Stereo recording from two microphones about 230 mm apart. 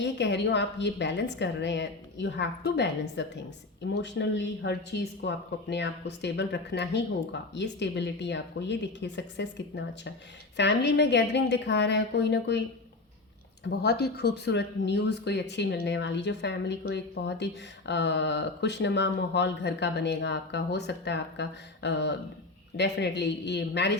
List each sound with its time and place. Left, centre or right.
0.0 s speech: left
13.7 s speech: left